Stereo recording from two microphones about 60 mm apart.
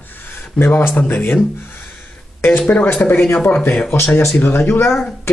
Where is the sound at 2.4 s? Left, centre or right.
Left.